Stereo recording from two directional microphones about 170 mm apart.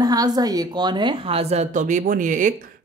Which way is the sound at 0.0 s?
20° right (ahead or behind).